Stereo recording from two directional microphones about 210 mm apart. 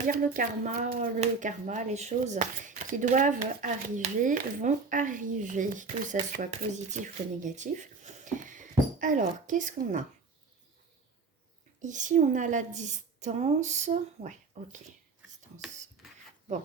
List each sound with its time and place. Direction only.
0.0 s speech: 40° right (ahead or behind)
11.8 s speech: 35° right (ahead or behind)